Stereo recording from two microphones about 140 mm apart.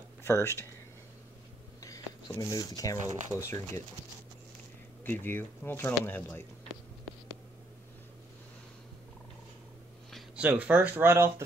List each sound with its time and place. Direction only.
0.2 s speech: 20° left (ahead or behind)
1.8 s speech: 25° left (ahead or behind)
5.0 s speech: 15° left (ahead or behind)
10.1 s speech: 10° right (ahead or behind)